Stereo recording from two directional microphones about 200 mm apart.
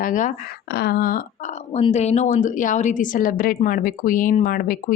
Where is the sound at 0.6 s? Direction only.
55° left (ahead or behind).